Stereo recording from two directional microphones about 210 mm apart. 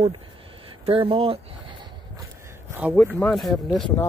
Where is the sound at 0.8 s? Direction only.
25° right (ahead or behind).